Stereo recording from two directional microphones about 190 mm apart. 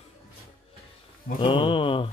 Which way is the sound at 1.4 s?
25° left (ahead or behind).